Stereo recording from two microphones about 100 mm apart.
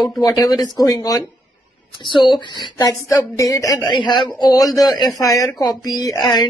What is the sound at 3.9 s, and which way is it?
Speech, 50° left (ahead or behind).